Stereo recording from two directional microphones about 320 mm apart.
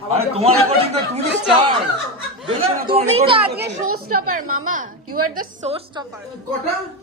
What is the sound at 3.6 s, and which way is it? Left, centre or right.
Speech, right.